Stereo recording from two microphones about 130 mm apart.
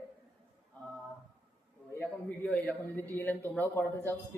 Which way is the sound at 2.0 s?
10° left (ahead or behind).